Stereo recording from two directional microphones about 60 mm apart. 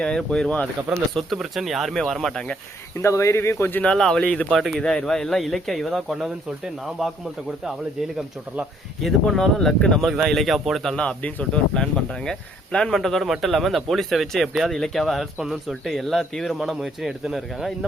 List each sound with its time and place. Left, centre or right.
0.0 s speech: centre
1.1 s speech: centre
3.0 s speech: left
3.8 s speech: centre
4.5 s speech: centre
9.2 s speech: centre
10.9 s speech: left; by 14.7 s centre
14.7 s speech: centre